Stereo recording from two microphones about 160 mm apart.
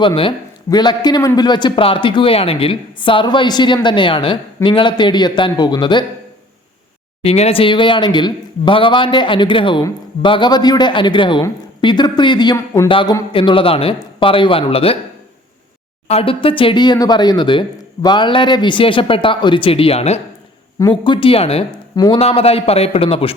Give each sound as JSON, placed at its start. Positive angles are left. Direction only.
{"t": 0.0, "sound": "a man's voice", "side_deg": 30}
{"t": 7.2, "sound": "a man's voice", "side_deg": 40}
{"t": 12.5, "sound": "speech", "side_deg": 15}
{"t": 12.9, "sound": "speech", "side_deg": 30}
{"t": 16.0, "sound": "speech", "side_deg": 35}
{"t": 20.7, "sound": "speech", "side_deg": 25}
{"t": 21.9, "sound": "a man's voice", "side_deg": 25}
{"t": 22.2, "sound": "speech", "side_deg": 40}